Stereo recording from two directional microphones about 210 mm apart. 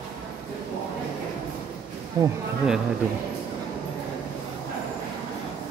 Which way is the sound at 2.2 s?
15° right (ahead or behind).